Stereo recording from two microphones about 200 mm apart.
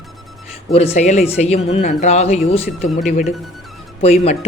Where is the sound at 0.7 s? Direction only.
30° left (ahead or behind).